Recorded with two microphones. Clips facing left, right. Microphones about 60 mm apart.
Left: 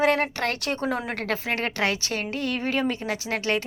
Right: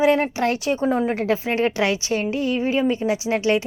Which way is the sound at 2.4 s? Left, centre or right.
Left.